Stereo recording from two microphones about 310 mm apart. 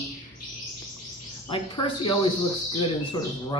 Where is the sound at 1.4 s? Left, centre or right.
Centre.